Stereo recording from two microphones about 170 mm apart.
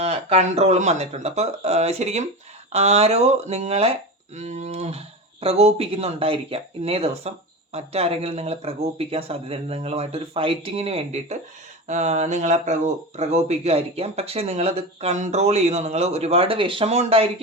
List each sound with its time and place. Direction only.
0.0 s speech: 40° right (ahead or behind)